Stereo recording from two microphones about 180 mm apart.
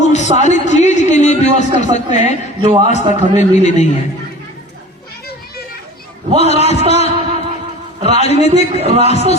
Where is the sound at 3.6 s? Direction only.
40° left (ahead or behind).